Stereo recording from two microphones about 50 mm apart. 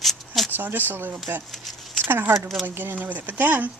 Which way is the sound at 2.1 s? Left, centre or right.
Right.